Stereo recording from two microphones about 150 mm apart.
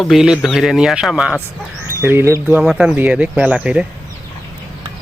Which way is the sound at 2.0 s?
15° right (ahead or behind).